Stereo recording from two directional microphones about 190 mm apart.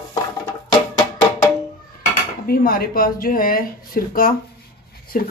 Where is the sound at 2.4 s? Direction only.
50° left (ahead or behind).